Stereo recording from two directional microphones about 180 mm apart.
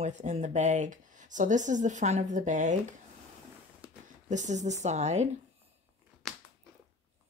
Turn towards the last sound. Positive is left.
turn(degrees=0)  # may be behind; listen again after turning